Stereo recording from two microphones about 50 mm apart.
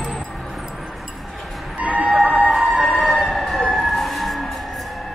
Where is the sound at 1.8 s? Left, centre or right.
Right.